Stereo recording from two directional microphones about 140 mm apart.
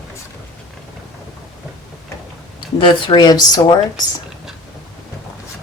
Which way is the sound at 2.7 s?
35° left (ahead or behind).